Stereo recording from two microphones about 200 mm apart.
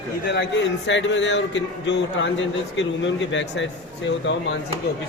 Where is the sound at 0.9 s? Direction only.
65° left (ahead or behind).